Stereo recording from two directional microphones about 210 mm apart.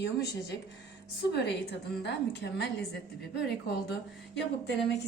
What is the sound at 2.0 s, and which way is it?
Speech, 55° left (ahead or behind).